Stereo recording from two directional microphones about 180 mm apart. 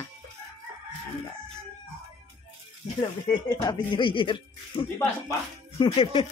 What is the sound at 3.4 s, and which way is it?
Speech, 25° left (ahead or behind).